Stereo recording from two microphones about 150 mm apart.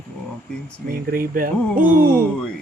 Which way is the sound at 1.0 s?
80° right.